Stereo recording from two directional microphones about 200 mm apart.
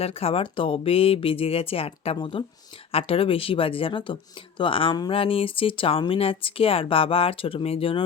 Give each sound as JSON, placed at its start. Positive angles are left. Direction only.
{"t": 0.0, "sound": "speech", "side_deg": 30}